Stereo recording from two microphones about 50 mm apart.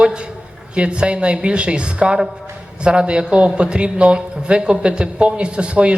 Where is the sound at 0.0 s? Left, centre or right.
Centre.